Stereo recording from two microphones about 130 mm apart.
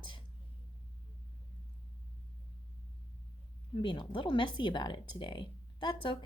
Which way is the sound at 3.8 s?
40° left (ahead or behind).